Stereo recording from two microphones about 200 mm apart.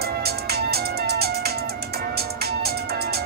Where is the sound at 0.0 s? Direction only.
50° right (ahead or behind).